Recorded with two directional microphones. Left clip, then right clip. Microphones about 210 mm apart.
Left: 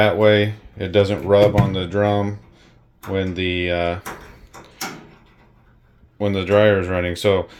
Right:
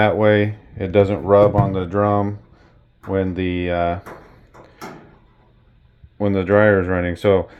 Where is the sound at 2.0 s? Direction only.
35° right (ahead or behind).